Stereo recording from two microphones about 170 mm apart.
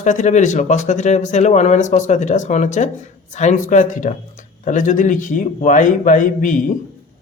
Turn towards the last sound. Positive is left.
turn(degrees=50)  # may be behind; listen again after turning